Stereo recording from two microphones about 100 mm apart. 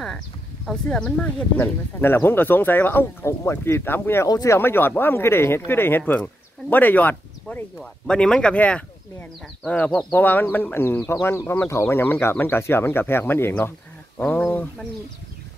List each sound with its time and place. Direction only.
0.7 s speech: 5° left (ahead or behind)
1.6 s speech: 20° left (ahead or behind)
4.3 s speech: 35° left (ahead or behind)
4.6 s speech: 20° left (ahead or behind)
7.8 s speech: 5° left (ahead or behind)